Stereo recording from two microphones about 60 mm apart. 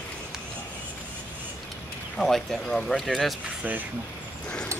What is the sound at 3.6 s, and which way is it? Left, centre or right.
Speech, right.